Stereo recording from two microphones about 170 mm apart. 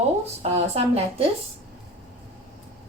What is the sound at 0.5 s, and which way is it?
Speech, 40° right (ahead or behind).